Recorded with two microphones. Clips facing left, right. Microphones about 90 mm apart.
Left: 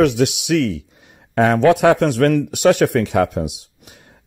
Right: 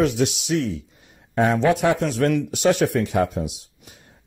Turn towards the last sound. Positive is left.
turn(degrees=70)  # may be behind; listen again after turning